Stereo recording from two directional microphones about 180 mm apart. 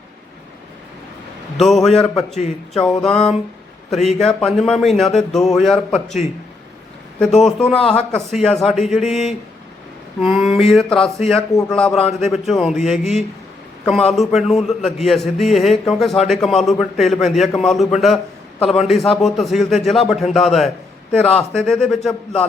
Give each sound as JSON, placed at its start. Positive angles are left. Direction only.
{"t": 1.5, "sound": "a man's voice", "side_deg": 0}
{"t": 2.3, "sound": "speech", "side_deg": 40}
{"t": 2.8, "sound": "a man's voice", "side_deg": 5}
{"t": 7.4, "sound": "a man's voice", "side_deg": 5}
{"t": 11.9, "sound": "speech", "side_deg": 35}
{"t": 12.3, "sound": "a man's voice", "side_deg": 0}